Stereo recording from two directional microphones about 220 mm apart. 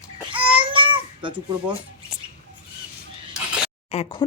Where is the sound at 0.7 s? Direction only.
25° right (ahead or behind).